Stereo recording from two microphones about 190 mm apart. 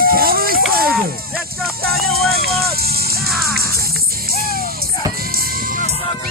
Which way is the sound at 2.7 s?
55° right (ahead or behind).